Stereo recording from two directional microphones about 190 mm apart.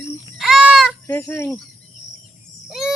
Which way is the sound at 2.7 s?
5° right (ahead or behind).